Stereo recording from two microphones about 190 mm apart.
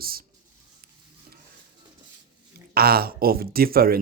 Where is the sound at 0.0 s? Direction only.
50° right (ahead or behind).